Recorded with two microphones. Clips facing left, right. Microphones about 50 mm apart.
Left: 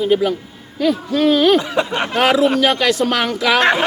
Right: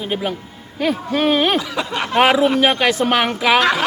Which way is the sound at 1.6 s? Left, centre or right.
Left.